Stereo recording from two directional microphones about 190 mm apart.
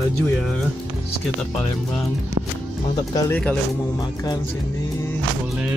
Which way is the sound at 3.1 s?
20° left (ahead or behind).